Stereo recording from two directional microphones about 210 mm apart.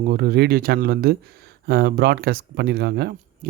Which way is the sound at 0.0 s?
45° right (ahead or behind).